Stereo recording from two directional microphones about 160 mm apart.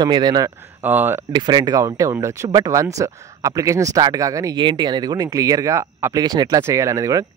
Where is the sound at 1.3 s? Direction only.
25° right (ahead or behind).